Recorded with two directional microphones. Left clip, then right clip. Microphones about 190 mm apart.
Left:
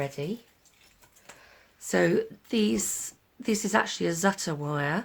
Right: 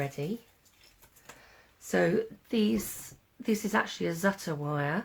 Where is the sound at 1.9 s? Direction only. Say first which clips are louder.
Left 3 dB; 45° left (ahead or behind).